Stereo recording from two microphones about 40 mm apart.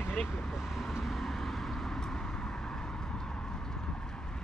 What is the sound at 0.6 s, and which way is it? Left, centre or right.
Vehicle, centre.